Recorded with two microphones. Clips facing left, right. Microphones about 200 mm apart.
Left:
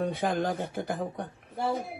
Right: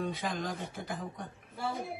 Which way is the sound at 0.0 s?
60° left (ahead or behind).